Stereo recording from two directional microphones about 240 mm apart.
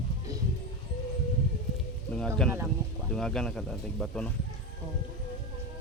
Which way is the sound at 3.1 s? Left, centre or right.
Centre.